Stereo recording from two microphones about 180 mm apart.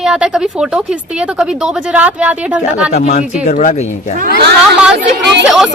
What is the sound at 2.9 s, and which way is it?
Speech, 40° left (ahead or behind).